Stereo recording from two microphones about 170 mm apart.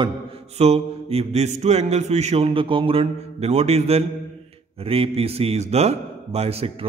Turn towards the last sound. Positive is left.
turn(degrees=-35)  # may be behind; listen again after turning